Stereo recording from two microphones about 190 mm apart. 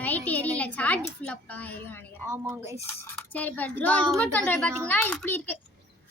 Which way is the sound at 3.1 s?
10° left (ahead or behind).